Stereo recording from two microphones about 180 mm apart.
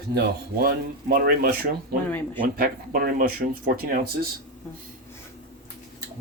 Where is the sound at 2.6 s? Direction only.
55° right (ahead or behind).